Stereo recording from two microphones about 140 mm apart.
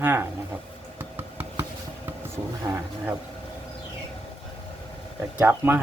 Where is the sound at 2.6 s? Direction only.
15° right (ahead or behind).